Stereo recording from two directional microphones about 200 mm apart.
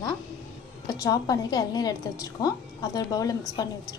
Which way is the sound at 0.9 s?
20° left (ahead or behind).